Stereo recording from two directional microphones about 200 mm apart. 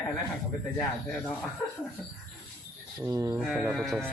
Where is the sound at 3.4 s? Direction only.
Centre (ahead or behind).